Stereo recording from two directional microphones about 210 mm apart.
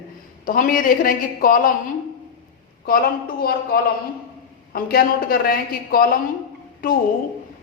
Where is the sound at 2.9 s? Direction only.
45° left (ahead or behind).